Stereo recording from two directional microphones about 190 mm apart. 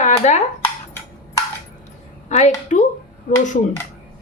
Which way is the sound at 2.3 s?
40° left (ahead or behind).